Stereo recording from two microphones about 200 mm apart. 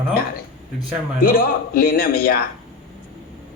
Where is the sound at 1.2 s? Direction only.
45° left (ahead or behind).